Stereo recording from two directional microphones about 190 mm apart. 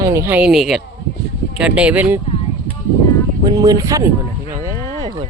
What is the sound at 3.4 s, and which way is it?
Speech, 20° right (ahead or behind).